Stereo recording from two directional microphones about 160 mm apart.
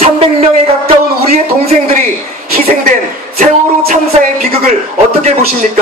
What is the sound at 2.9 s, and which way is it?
Speech, 55° right (ahead or behind).